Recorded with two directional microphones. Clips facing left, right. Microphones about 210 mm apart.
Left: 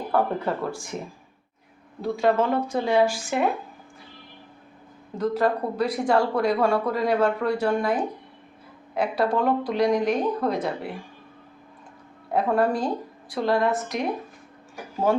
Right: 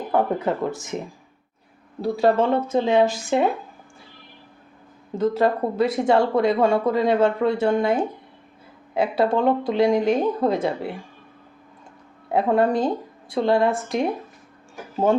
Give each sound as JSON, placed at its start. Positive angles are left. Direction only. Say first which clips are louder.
{"t": 0.1, "sound": "speech", "louder": "right 3 dB", "side_deg": -20}
{"t": 2.0, "sound": "speech", "louder": "right 3 dB", "side_deg": -35}
{"t": 5.1, "sound": "speech", "louder": "right 3 dB", "side_deg": -25}
{"t": 12.3, "sound": "speech", "louder": "right 3 dB", "side_deg": -25}